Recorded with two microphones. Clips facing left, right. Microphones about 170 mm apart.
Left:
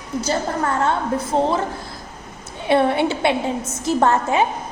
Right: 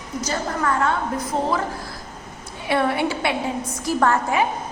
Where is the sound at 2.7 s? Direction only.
25° left (ahead or behind).